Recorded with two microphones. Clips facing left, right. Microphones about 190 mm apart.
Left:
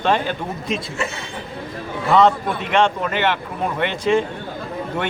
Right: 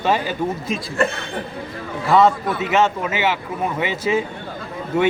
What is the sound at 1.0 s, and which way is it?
Speech, 60° right (ahead or behind).